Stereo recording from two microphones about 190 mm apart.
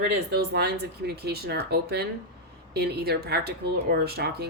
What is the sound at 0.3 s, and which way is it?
Speech, 55° right (ahead or behind).